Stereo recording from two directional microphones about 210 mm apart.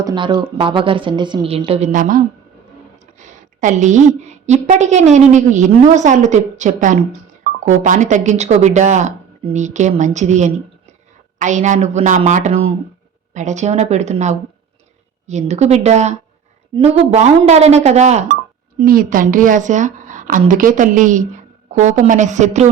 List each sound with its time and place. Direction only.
0.0 s a woman's voice: 20° right (ahead or behind); by 2.2 s 40° right (ahead or behind)
3.2 s a sound: 35° right (ahead or behind)
4.2 s speech: 35° right (ahead or behind)